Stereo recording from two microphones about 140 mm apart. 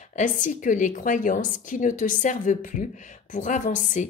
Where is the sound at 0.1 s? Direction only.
65° left (ahead or behind).